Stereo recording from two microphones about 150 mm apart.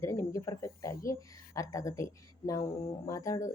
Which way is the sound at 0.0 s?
20° left (ahead or behind).